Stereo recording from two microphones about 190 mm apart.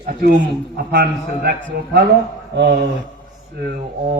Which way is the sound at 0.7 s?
55° right (ahead or behind).